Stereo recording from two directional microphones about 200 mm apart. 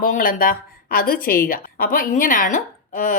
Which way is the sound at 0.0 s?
45° left (ahead or behind).